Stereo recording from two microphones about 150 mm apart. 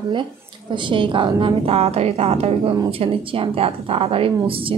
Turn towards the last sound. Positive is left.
turn(degrees=-35)  # may be behind; listen again after turning